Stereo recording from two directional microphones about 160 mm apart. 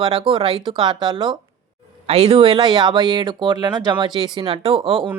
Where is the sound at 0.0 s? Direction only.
35° right (ahead or behind).